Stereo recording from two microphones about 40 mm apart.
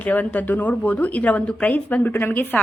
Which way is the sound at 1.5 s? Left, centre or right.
Left.